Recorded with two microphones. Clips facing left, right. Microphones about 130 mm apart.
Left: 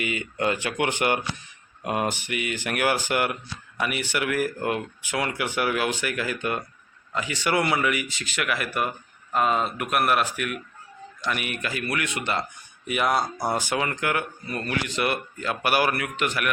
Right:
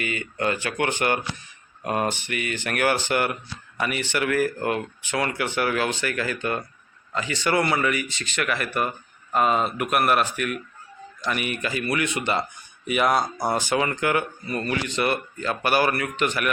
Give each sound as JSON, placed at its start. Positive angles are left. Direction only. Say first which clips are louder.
{"t": 0.0, "sound": "speech", "louder": "even", "side_deg": 15}